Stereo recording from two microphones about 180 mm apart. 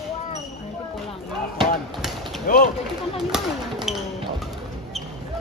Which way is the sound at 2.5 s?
50° left (ahead or behind).